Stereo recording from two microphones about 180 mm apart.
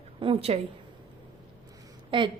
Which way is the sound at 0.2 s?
30° right (ahead or behind).